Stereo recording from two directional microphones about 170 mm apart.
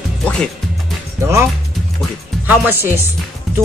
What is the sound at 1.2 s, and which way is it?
Speech, 15° right (ahead or behind).